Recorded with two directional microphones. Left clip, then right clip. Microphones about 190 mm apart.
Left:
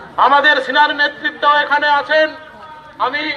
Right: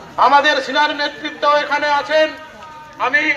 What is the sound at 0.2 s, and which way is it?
A man's voice, 10° right (ahead or behind).